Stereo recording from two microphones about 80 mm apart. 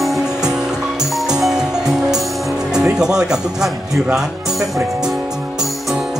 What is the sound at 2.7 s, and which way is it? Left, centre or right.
Speech, centre.